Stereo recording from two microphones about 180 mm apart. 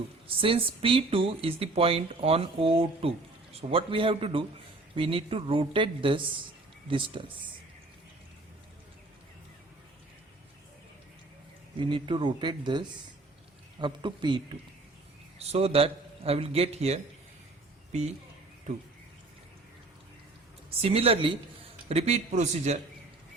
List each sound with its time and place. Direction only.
0.3 s a woman's voice: 30° right (ahead or behind)
11.8 s a woman's voice: 25° right (ahead or behind)
13.8 s a woman's voice: 25° right (ahead or behind)
20.7 s speech: 30° right (ahead or behind)